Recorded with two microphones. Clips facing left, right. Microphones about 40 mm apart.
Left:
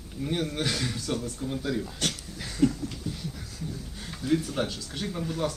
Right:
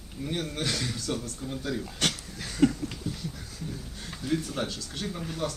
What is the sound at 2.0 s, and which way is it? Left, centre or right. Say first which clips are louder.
Speech: right 2 dB; right.